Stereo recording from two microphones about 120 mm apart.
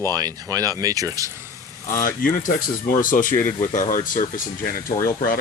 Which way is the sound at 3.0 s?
90° left.